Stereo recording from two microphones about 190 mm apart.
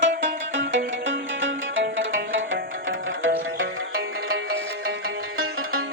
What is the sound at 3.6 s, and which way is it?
Music, 90° right.